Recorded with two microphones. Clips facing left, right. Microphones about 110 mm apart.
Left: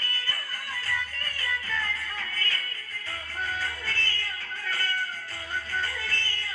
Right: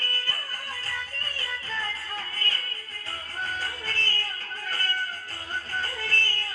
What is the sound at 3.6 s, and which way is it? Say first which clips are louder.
Music: even; 35° right (ahead or behind).